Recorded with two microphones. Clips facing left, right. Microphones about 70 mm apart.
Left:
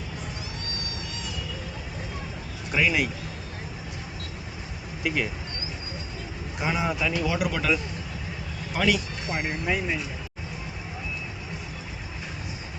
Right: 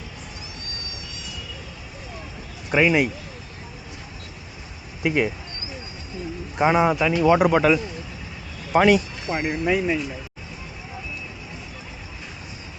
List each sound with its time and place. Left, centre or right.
2.7 s speech: right
5.0 s speech: right
6.6 s speech: right
7.2 s speech: right
9.2 s speech: centre